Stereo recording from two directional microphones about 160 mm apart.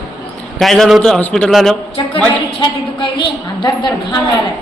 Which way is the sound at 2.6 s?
30° left (ahead or behind).